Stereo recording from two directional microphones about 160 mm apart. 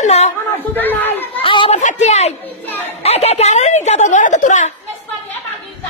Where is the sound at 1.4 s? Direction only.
30° left (ahead or behind).